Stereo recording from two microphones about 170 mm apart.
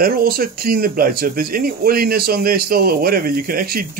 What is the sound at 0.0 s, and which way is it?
Speech, 60° right (ahead or behind).